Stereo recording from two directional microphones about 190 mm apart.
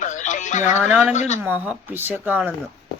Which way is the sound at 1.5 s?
10° right (ahead or behind).